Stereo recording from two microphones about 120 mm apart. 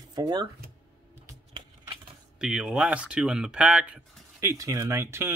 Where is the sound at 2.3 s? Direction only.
5° right (ahead or behind).